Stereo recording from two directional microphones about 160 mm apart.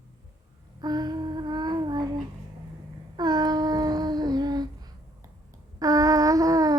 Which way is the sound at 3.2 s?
25° right (ahead or behind).